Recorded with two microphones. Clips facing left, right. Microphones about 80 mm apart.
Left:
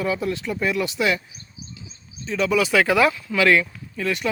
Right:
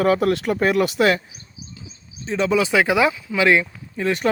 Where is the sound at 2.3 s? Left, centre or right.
Right.